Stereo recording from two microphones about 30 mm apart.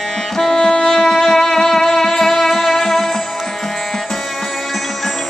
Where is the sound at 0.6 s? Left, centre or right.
Left.